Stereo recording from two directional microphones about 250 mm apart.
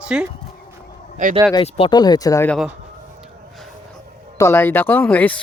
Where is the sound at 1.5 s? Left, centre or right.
Left; by 2.6 s centre.